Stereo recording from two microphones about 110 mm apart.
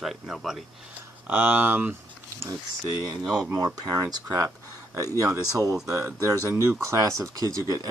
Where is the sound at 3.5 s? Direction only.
35° right (ahead or behind).